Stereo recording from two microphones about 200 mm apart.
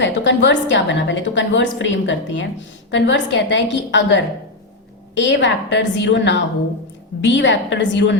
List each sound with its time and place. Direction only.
0.0 s a woman's voice: 65° left (ahead or behind)